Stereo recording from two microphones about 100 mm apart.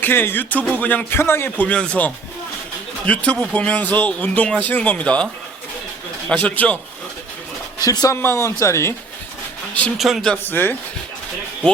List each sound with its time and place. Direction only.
0.0 s music: 20° left (ahead or behind)
0.8 s speech: 15° left (ahead or behind)
6.3 s speech: 15° left (ahead or behind)
7.8 s speech: 40° left (ahead or behind)
8.2 s music: 25° left (ahead or behind)
10.0 s a man's voice: 5° right (ahead or behind)
10.2 s music: 15° left (ahead or behind)